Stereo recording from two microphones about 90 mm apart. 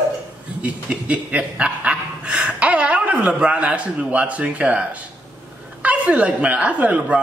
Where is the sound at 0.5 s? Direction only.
15° right (ahead or behind).